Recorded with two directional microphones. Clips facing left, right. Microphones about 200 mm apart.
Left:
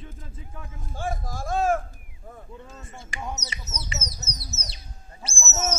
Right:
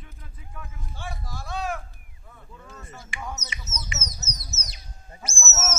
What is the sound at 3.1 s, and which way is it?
Bird, 40° left (ahead or behind).